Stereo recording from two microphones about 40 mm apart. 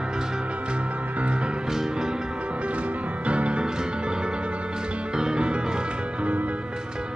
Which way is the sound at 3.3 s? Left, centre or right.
Right.